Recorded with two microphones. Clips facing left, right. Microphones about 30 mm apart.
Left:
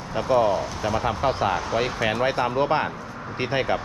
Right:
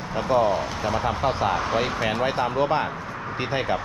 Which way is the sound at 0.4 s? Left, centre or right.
Right.